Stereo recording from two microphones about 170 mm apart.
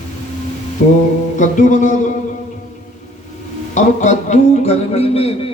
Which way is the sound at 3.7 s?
45° left (ahead or behind).